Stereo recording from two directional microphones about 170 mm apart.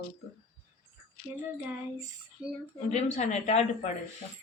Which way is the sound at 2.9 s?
40° left (ahead or behind).